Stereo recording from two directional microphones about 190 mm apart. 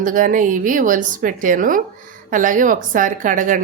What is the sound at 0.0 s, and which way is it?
A woman's voice, 45° right (ahead or behind).